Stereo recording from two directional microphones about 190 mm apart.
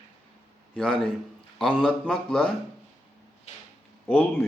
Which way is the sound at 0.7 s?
Centre (ahead or behind).